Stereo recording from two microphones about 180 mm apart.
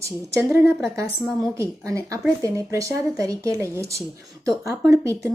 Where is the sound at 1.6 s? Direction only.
15° right (ahead or behind).